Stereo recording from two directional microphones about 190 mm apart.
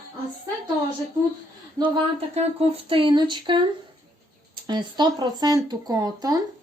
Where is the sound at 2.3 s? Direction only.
30° right (ahead or behind).